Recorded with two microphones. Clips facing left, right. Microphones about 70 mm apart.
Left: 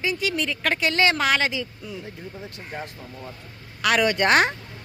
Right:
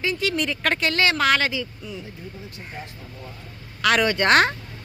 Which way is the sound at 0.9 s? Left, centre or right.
Left.